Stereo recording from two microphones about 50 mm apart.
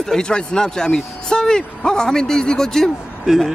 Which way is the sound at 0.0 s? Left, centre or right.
Centre.